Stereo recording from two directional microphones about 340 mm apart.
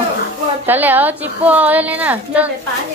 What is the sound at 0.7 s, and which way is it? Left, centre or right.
Speech, centre.